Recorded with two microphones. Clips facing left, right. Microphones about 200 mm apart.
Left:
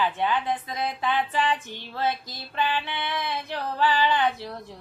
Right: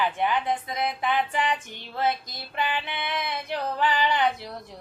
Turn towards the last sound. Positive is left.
turn(degrees=-15)  # may be behind; listen again after turning